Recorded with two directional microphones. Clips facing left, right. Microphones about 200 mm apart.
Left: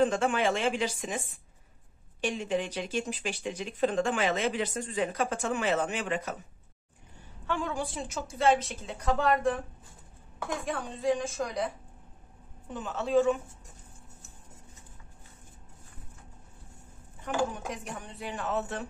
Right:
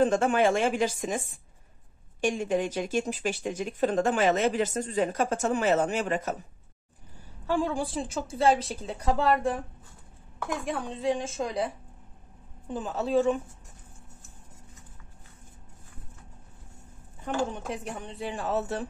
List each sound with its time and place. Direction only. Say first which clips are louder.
0.0 s speech: right 3 dB; 40° right (ahead or behind)
7.4 s a woman's voice: right 5 dB; 30° right (ahead or behind)
10.7 s speech: even; 25° right (ahead or behind)
12.7 s a woman's voice: right 1 dB; 35° right (ahead or behind)
17.2 s speech: right 1 dB; 25° right (ahead or behind)